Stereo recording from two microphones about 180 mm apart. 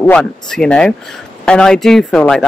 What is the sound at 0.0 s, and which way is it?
Speech, 5° left (ahead or behind).